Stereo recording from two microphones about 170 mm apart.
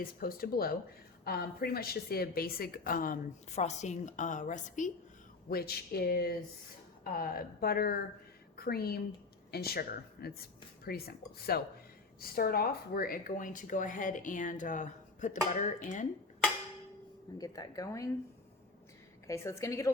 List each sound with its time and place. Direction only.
0.0 s a woman's voice: 60° left (ahead or behind)
3.5 s speech: 40° left (ahead or behind)
5.5 s a woman's voice: 65° left (ahead or behind); by 16.0 s 45° left (ahead or behind)
17.3 s speech: 20° left (ahead or behind)
19.3 s a woman's voice: 15° left (ahead or behind)